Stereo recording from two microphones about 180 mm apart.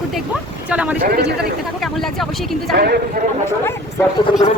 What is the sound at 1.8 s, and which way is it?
Speech, centre (ahead or behind).